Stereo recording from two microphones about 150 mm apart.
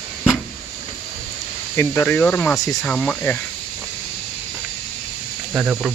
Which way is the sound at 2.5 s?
25° left (ahead or behind).